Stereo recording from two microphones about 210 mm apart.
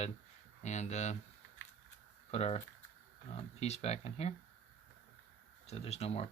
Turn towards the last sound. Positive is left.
turn(degrees=30)  # may be behind; listen again after turning